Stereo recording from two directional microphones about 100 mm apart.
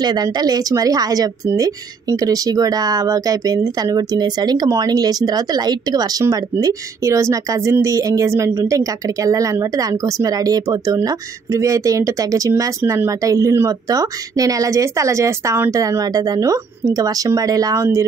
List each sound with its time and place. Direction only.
0.0 s speech: 45° right (ahead or behind)